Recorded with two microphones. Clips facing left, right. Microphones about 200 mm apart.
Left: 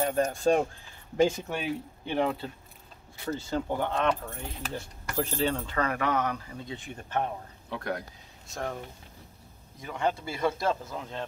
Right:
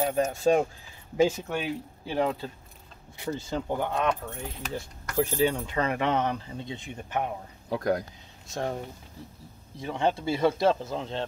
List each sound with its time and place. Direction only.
0.0 s speech: 5° right (ahead or behind)
3.3 s speech: 15° right (ahead or behind); by 5.1 s centre (ahead or behind)
5.1 s speech: 10° right (ahead or behind)
7.7 s speech: 40° right (ahead or behind)
9.8 s speech: 30° right (ahead or behind)